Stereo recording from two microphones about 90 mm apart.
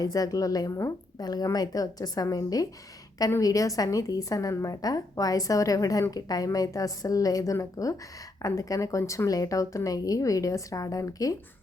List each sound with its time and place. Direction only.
0.0 s a woman's voice: 45° left (ahead or behind)